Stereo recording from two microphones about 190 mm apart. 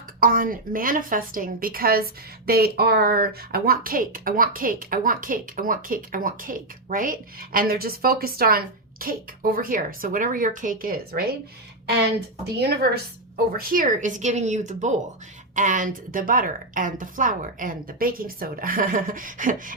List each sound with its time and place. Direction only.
0.2 s speech: 45° right (ahead or behind)